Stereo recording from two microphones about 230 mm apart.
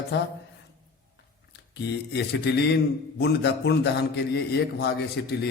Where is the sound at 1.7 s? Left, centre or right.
Left.